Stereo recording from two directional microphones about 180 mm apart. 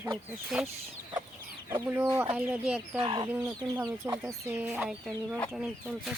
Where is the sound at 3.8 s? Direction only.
15° right (ahead or behind).